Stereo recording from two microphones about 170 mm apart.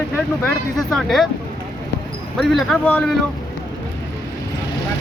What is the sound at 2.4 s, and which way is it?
Speech, centre (ahead or behind).